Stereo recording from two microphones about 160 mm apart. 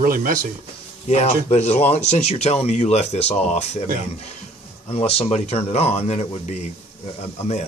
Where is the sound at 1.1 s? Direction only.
45° left (ahead or behind).